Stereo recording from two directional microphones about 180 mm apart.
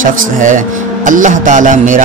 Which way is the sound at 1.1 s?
45° right (ahead or behind).